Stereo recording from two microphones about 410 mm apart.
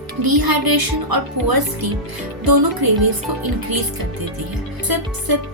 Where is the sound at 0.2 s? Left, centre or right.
Right.